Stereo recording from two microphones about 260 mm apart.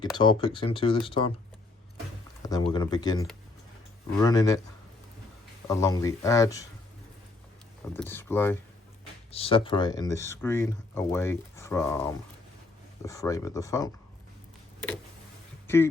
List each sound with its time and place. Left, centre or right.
0.0 s speech: centre
2.7 s speech: centre
5.6 s speech: centre
7.9 s speech: centre
9.3 s speech: left
15.6 s speech: centre